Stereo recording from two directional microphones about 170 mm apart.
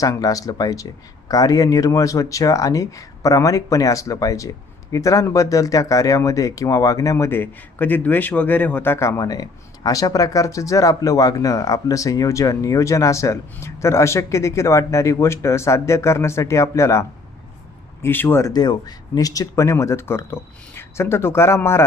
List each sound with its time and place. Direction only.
0.0 s speech: 20° left (ahead or behind)